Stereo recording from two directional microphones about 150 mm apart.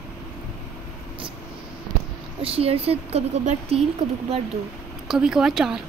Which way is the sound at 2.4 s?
40° right (ahead or behind).